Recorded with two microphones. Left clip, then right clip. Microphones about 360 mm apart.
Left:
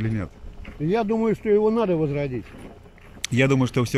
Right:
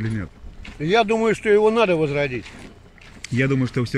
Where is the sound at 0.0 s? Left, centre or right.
Centre.